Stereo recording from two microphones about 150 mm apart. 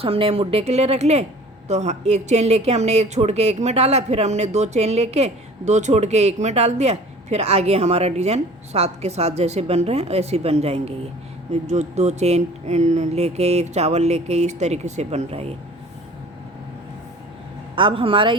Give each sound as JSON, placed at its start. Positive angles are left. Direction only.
{"t": 0.0, "sound": "speech", "side_deg": -40}
{"t": 17.7, "sound": "a man's voice", "side_deg": -35}